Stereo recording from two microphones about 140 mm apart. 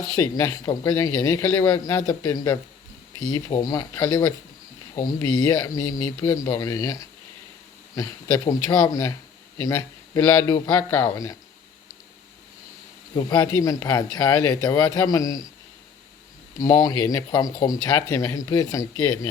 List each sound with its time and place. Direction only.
0.2 s speech: 20° left (ahead or behind)
8.4 s speech: 20° left (ahead or behind)
13.1 s speech: 30° left (ahead or behind)
16.6 s speech: 25° left (ahead or behind)